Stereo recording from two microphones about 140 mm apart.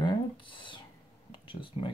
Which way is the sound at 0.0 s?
35° left (ahead or behind).